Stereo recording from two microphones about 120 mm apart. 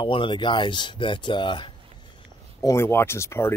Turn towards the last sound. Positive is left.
turn(degrees=20)  # may be behind; listen again after turning